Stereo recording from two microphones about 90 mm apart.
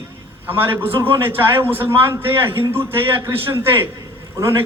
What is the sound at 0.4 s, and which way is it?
A man's voice, 25° right (ahead or behind).